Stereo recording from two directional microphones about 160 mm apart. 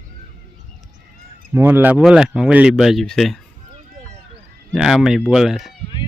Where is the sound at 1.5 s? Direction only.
15° right (ahead or behind).